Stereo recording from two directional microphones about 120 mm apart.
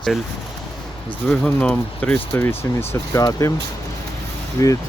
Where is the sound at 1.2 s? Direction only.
10° left (ahead or behind).